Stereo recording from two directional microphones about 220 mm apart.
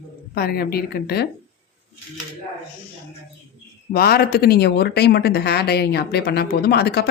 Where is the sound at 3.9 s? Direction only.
45° left (ahead or behind).